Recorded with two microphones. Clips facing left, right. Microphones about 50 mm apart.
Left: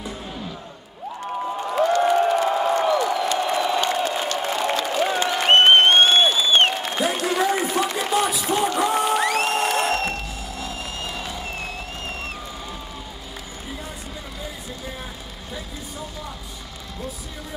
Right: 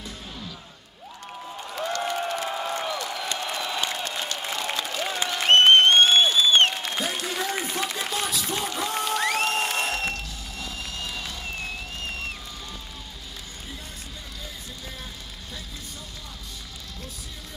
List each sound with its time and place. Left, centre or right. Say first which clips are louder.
0.0 s music: left 6 dB; left
1.4 s crowd: left 11 dB; left
1.9 s a sound: left 9 dB; centre
2.9 s applause: left 10 dB; centre
3.3 s crowd: left 8 dB; centre
4.4 s a sound: left 7 dB; centre
4.9 s crowd: left 7 dB; centre
9.4 s music: left 4 dB; left
10.6 s music: left 2 dB; centre